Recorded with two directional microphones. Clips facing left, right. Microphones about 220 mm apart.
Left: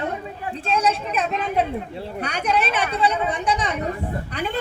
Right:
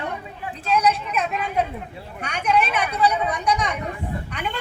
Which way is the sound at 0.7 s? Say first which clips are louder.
Right 1 dB; 30° left (ahead or behind).